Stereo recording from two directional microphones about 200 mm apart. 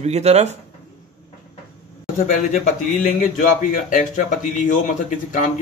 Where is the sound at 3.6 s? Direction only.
40° left (ahead or behind).